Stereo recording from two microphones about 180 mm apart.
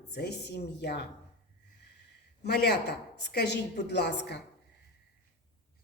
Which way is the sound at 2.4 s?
65° left (ahead or behind).